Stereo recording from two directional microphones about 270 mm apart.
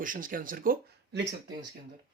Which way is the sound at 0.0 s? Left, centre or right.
Right.